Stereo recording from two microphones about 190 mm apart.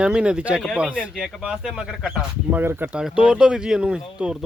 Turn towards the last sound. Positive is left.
turn(degrees=-5)  # may be behind; listen again after turning